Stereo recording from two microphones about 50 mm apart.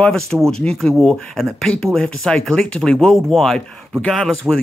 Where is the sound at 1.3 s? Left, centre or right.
Centre.